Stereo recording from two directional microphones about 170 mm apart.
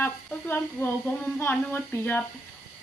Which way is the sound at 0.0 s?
10° left (ahead or behind).